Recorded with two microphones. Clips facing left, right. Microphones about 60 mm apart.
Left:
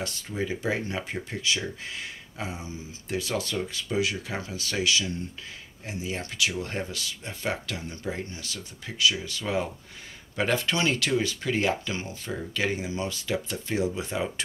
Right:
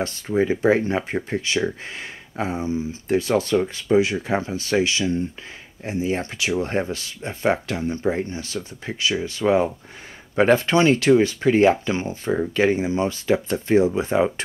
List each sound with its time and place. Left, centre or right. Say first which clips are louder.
0.4 s speech: right 11 dB; right